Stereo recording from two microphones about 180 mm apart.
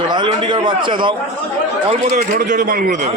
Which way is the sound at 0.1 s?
25° right (ahead or behind).